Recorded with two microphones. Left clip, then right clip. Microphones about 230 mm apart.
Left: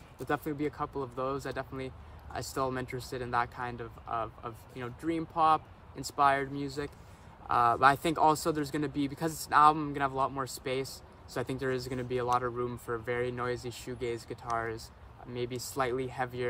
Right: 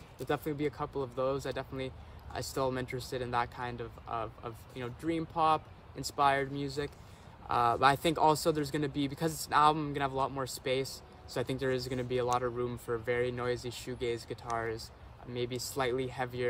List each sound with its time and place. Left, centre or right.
0.3 s speech: centre